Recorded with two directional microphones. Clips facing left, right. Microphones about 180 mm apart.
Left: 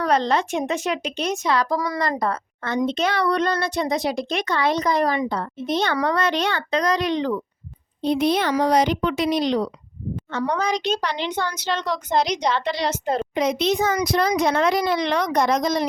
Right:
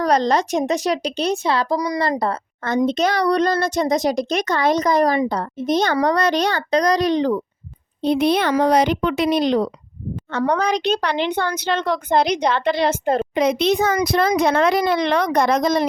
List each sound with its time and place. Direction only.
0.0 s a child's voice: 40° right (ahead or behind)
1.7 s a woman's voice: 20° right (ahead or behind)
2.0 s a woman's voice: 30° right (ahead or behind)
2.6 s a child's voice: 40° right (ahead or behind)
8.0 s speech: 65° right (ahead or behind)
10.3 s speech: 60° right (ahead or behind)